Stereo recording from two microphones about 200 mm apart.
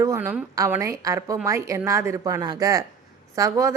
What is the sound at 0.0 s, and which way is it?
A woman's voice, 10° right (ahead or behind).